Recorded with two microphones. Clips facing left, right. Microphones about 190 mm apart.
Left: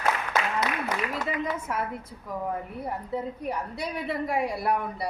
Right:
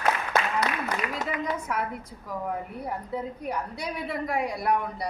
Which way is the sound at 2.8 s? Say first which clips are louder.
Left 2 dB; centre (ahead or behind).